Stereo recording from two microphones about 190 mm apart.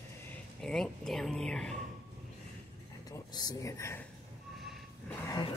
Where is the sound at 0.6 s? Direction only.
5° left (ahead or behind).